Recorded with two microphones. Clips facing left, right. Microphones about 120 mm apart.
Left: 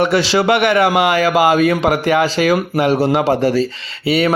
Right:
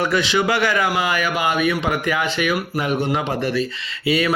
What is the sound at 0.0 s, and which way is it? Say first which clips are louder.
Speech: left 5 dB; 30° left (ahead or behind).